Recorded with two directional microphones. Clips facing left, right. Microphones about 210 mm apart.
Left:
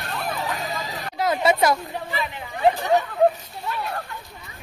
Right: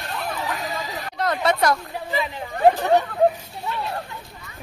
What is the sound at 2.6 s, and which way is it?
Speech, 50° right (ahead or behind).